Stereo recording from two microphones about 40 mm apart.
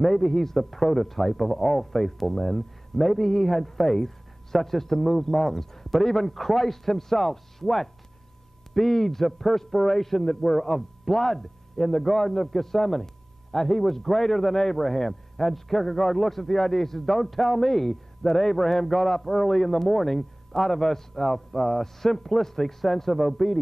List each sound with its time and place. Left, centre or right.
0.0 s a man's voice: centre